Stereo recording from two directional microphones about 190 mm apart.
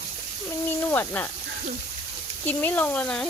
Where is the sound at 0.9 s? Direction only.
10° left (ahead or behind).